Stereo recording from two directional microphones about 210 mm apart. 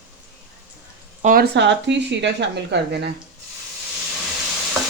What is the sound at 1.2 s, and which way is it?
Speech, 45° right (ahead or behind).